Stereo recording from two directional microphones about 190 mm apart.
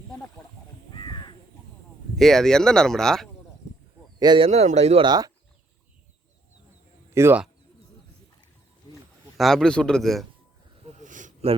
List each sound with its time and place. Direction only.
0.9 s crow: 25° left (ahead or behind)
2.1 s speech: centre (ahead or behind)
4.2 s speech: 25° right (ahead or behind)
5.0 s speech: 20° right (ahead or behind)
7.1 s speech: 10° right (ahead or behind)
9.4 s speech: centre (ahead or behind)
10.8 s a sound: 40° right (ahead or behind)